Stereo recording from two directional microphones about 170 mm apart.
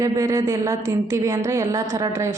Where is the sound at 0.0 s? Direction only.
20° right (ahead or behind).